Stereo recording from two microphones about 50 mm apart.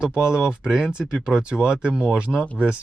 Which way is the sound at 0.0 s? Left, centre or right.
Centre.